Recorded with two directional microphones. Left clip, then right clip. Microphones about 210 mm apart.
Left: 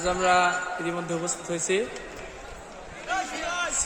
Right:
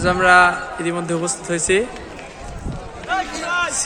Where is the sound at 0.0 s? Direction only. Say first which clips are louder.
Right 9 dB; 5° left (ahead or behind).